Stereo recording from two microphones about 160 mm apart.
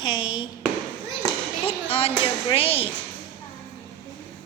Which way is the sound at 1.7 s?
35° left (ahead or behind).